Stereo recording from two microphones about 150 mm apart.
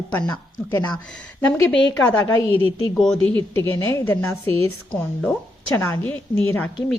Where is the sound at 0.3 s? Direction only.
15° left (ahead or behind).